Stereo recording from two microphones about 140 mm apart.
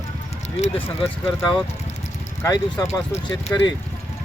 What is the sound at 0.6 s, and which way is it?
Speech, 50° left (ahead or behind).